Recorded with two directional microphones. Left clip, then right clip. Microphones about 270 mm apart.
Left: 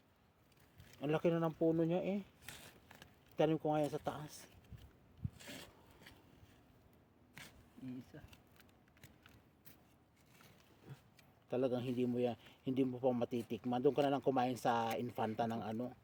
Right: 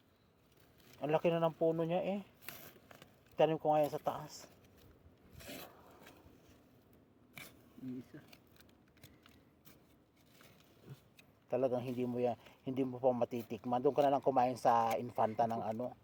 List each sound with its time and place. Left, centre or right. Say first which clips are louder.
0.9 s speech: right 3 dB; centre
8.1 s speech: right 2 dB; left
11.4 s speech: right 3 dB; centre